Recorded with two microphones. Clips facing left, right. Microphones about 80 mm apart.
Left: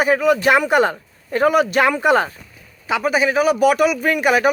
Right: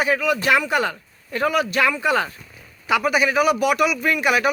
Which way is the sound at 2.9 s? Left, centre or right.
Left.